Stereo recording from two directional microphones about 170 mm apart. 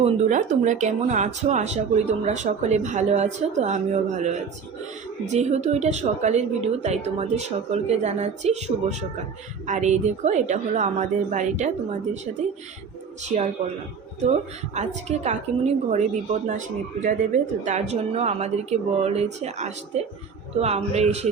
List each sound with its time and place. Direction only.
0.0 s a woman's voice: 45° right (ahead or behind)
13.2 s speech: 45° right (ahead or behind)
14.8 s a woman's voice: 40° right (ahead or behind)